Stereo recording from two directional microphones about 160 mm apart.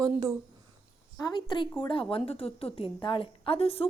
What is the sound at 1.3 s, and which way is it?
A woman's voice, 30° left (ahead or behind).